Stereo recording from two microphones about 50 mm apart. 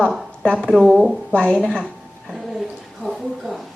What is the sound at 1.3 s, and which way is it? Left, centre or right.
Speech, left.